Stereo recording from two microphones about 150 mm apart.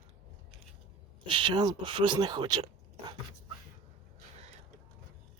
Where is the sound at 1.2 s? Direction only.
30° right (ahead or behind).